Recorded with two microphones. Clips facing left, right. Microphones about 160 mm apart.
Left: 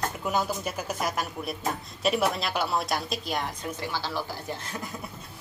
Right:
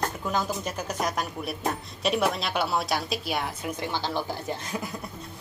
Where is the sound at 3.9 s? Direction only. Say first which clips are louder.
Right 3 dB; 20° right (ahead or behind).